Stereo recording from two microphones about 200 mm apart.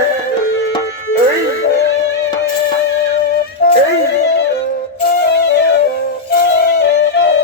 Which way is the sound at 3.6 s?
45° left (ahead or behind).